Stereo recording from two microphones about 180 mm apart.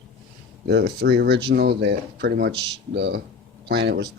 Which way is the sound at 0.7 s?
65° right (ahead or behind).